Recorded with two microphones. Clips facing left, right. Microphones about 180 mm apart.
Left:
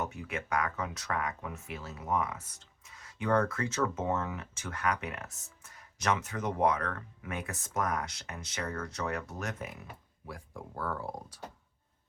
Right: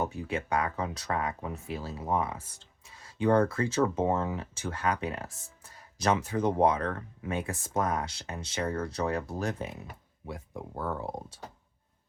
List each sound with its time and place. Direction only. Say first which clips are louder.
0.0 s speech: right 5 dB; 30° right (ahead or behind)